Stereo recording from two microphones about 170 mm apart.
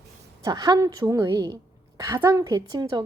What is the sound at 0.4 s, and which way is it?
A woman's voice, 20° right (ahead or behind).